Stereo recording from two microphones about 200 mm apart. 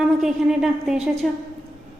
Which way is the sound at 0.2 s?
Centre (ahead or behind).